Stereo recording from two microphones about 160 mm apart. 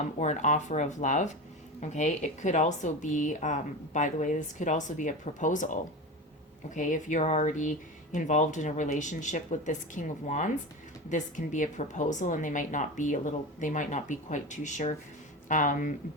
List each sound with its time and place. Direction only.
0.2 s speech: 50° left (ahead or behind)